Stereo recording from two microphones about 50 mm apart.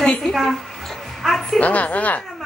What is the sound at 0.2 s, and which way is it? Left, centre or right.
Speech, centre.